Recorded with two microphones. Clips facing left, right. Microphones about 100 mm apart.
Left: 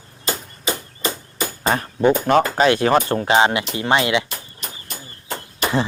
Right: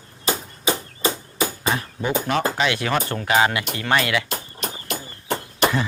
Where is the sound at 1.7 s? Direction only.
45° left (ahead or behind).